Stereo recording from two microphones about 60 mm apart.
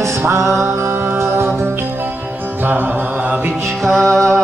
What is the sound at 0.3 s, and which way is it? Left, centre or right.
Music, right.